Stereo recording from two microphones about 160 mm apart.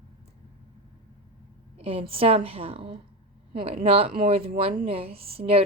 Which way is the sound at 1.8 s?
35° right (ahead or behind).